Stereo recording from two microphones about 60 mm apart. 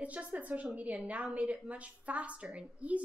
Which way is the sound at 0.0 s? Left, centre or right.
Right.